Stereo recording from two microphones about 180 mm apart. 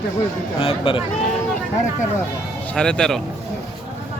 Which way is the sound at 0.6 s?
30° left (ahead or behind).